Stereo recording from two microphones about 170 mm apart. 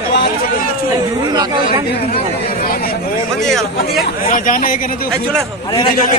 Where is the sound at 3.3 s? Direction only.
5° left (ahead or behind).